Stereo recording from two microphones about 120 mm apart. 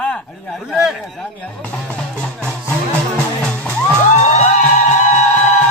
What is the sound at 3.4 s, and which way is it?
Music, 10° left (ahead or behind).